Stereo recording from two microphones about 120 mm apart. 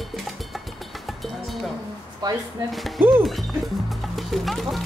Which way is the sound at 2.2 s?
35° right (ahead or behind).